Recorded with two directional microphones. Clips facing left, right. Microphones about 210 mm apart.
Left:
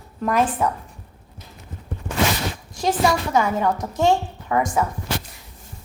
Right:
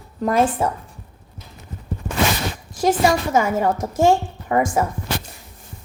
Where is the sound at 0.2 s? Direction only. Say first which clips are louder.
Right 2 dB; 35° right (ahead or behind).